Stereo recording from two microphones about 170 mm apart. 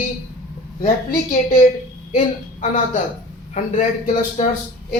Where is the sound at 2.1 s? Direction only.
45° left (ahead or behind).